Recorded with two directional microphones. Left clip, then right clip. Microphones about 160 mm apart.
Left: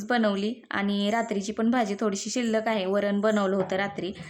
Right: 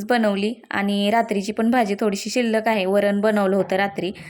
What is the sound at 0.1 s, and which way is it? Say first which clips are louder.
A woman's voice: right 5 dB; 20° right (ahead or behind).